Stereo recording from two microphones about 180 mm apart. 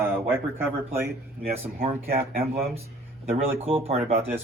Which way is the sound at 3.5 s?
35° right (ahead or behind).